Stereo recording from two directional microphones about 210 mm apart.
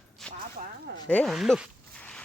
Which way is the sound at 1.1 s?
5° left (ahead or behind).